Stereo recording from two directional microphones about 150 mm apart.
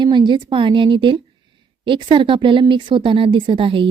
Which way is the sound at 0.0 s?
30° right (ahead or behind).